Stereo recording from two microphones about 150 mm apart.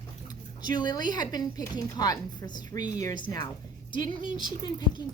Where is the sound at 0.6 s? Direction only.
30° left (ahead or behind).